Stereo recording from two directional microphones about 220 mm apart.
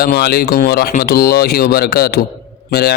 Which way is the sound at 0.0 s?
45° left (ahead or behind).